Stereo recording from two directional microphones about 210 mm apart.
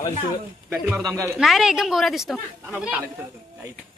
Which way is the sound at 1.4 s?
Centre (ahead or behind).